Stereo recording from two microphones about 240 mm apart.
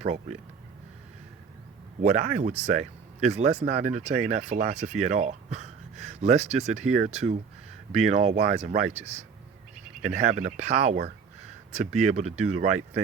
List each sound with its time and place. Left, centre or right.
0.0 s speech: right
2.0 s speech: right
10.0 s speech: right